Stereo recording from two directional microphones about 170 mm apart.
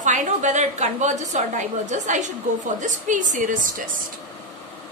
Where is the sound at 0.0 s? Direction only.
45° right (ahead or behind).